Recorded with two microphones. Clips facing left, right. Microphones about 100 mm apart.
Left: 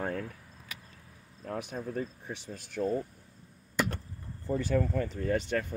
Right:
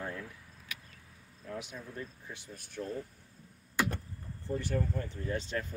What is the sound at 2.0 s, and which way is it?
Speech, 80° left.